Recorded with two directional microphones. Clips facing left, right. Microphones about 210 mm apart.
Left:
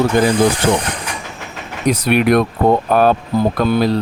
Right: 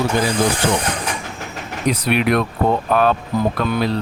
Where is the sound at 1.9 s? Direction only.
45° left (ahead or behind).